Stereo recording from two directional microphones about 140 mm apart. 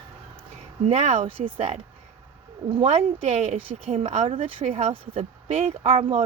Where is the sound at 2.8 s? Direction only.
50° right (ahead or behind).